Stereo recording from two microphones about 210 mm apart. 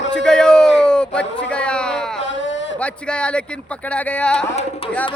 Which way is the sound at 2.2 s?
60° left (ahead or behind).